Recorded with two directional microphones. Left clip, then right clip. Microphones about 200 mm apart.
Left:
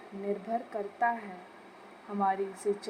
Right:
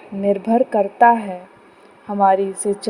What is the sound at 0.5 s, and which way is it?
Speech, 35° right (ahead or behind).